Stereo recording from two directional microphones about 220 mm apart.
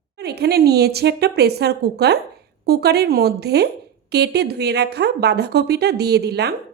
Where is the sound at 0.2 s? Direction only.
45° right (ahead or behind).